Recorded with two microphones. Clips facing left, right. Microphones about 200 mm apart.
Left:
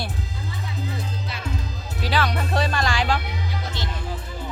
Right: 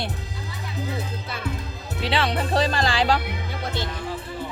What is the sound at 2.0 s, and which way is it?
Speech, 25° right (ahead or behind).